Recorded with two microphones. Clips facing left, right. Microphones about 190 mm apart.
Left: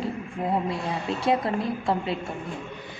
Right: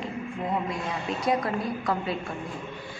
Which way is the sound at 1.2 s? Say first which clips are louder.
Left 2 dB; 25° left (ahead or behind).